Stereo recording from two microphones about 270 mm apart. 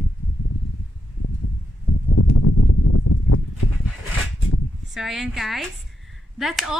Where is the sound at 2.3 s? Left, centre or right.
Left.